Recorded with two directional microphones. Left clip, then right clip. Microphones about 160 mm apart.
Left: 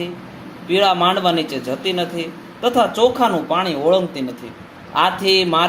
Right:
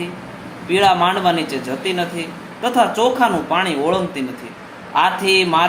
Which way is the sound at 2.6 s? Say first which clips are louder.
Even; 55° left (ahead or behind).